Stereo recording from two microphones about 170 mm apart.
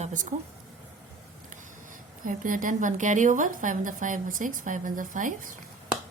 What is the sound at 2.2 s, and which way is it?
A woman's voice, 50° right (ahead or behind).